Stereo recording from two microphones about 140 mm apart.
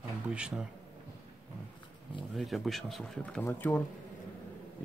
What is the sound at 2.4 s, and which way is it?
Speech, centre (ahead or behind).